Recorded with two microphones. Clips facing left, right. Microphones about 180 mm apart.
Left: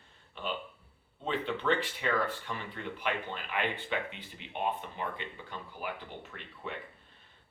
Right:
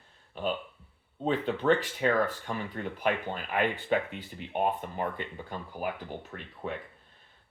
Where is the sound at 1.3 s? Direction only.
40° right (ahead or behind).